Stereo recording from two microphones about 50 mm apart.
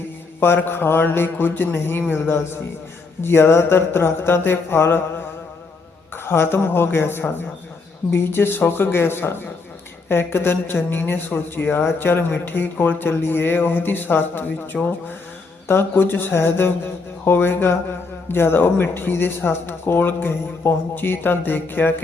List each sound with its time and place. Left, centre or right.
0.3 s speech: left
6.2 s speech: left